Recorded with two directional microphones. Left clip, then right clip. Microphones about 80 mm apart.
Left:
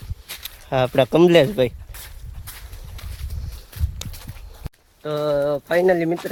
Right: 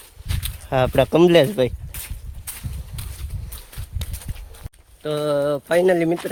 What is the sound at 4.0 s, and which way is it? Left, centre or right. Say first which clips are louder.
Clip-clop: left 2 dB; left.